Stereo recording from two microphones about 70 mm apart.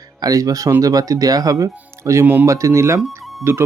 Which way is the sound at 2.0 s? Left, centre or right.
Right.